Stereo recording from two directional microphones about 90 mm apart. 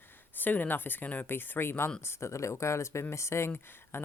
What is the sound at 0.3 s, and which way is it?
Speech, 20° left (ahead or behind).